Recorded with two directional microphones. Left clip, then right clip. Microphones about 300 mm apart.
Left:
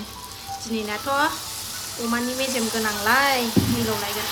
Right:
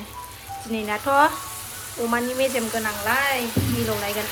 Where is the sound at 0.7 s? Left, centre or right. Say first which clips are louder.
Right 4 dB; centre.